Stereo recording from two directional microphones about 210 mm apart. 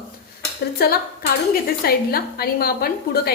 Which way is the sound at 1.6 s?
45° left (ahead or behind).